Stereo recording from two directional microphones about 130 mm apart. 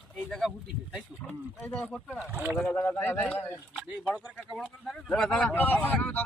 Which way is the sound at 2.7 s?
15° left (ahead or behind).